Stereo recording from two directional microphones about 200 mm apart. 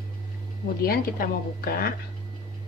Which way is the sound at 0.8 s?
45° left (ahead or behind).